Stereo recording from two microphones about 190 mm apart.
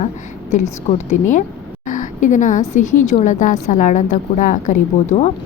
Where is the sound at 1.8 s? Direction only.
40° left (ahead or behind).